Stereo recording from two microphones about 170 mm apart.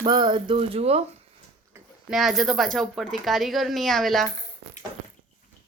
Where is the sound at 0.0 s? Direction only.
25° right (ahead or behind).